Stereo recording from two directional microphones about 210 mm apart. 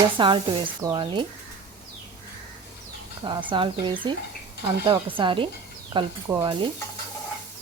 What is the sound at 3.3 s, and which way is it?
Stir, 20° right (ahead or behind).